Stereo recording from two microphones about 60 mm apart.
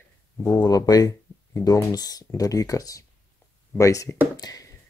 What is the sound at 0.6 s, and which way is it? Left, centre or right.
Speech, left.